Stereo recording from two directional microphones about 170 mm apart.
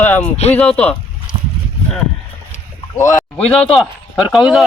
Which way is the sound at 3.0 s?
15° left (ahead or behind).